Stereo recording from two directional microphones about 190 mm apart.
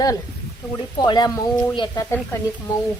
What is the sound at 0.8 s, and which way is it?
A woman's voice, 20° left (ahead or behind).